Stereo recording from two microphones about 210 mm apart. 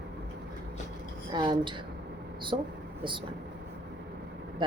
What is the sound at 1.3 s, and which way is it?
Speech, 20° right (ahead or behind).